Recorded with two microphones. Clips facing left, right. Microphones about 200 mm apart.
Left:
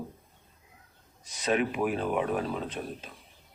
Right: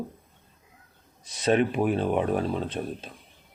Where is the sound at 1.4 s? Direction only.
30° right (ahead or behind).